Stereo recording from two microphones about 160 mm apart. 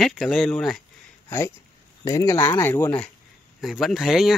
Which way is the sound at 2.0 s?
20° left (ahead or behind).